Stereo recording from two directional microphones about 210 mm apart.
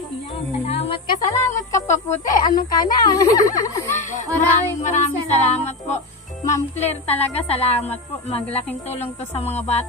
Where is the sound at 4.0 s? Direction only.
35° left (ahead or behind).